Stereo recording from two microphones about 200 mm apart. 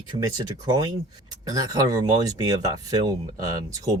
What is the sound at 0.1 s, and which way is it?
Speech, 35° right (ahead or behind).